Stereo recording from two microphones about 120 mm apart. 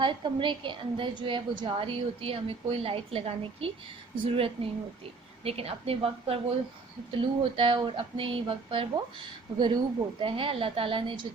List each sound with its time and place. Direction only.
0.0 s a woman's voice: 45° right (ahead or behind)